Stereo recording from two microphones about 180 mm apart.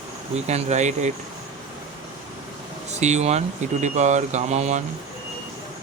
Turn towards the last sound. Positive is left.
turn(degrees=-40)  # may be behind; listen again after turning